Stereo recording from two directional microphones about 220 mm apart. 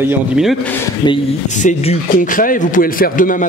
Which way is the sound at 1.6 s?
30° left (ahead or behind).